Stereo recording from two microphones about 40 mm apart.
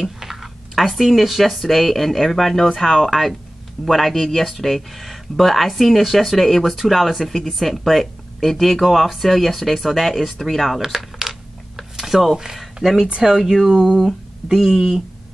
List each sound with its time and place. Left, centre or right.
0.2 s speech: centre
11.1 s a sound: centre
12.8 s speech: centre
13.9 s speech: centre